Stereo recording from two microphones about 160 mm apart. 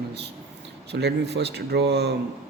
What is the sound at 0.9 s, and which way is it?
Speech, 90° right.